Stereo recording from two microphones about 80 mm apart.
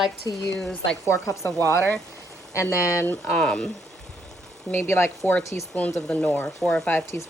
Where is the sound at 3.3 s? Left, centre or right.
Centre.